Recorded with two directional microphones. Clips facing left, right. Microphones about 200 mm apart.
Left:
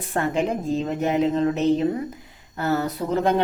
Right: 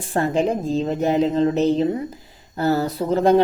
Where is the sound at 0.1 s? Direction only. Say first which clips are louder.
Right 3 dB; 30° right (ahead or behind).